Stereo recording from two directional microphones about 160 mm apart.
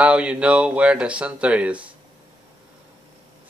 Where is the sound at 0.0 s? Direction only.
5° right (ahead or behind).